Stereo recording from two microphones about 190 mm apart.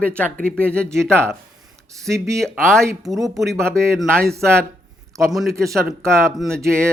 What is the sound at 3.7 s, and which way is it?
Speech, 15° right (ahead or behind).